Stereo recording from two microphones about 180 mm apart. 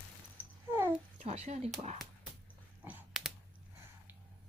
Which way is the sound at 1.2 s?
35° right (ahead or behind).